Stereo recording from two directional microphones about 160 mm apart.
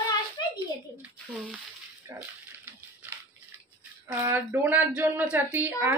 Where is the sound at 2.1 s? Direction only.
20° right (ahead or behind).